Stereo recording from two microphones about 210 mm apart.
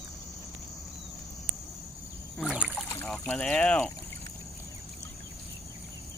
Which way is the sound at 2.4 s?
5° right (ahead or behind).